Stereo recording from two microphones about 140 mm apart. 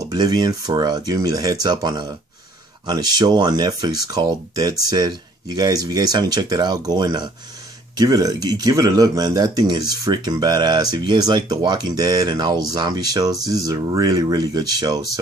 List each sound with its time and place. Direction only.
0.0 s speech: 30° right (ahead or behind)